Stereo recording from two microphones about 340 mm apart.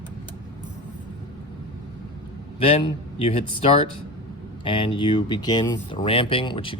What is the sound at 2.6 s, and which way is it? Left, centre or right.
Speech, centre.